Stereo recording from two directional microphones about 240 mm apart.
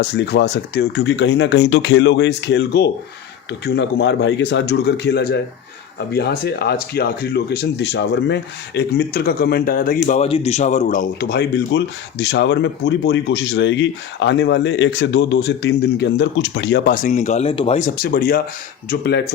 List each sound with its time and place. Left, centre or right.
0.0 s speech: left